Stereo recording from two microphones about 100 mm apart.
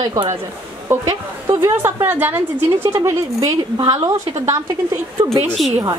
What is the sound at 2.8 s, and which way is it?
Speech, 30° right (ahead or behind).